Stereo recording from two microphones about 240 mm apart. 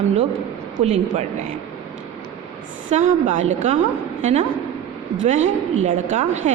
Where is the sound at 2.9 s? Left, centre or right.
Right.